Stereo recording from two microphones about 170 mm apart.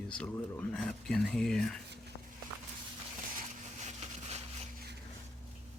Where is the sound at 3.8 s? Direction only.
40° right (ahead or behind).